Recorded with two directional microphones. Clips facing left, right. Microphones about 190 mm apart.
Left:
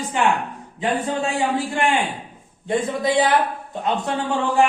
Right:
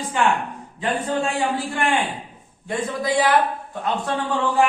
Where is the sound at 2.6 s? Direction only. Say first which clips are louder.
Left 3 dB; 25° left (ahead or behind).